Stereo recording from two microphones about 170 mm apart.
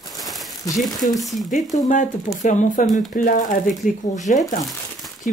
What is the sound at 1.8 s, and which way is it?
Speech, 45° left (ahead or behind).